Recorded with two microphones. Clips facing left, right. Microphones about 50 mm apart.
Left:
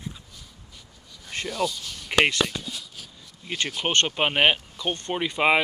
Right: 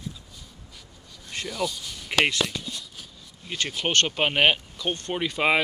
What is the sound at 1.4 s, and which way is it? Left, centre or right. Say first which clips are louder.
Speech: left 2 dB; left.